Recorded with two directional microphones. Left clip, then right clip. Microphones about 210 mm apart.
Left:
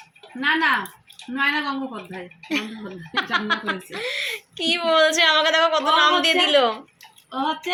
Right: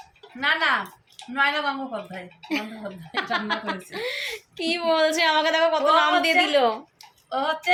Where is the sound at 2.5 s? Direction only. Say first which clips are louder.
Left 2 dB; 15° right (ahead or behind).